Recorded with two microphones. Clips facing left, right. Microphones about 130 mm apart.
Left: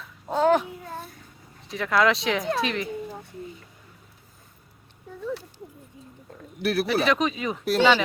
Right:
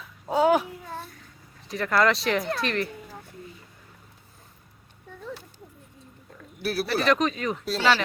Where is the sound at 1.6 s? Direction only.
Centre (ahead or behind).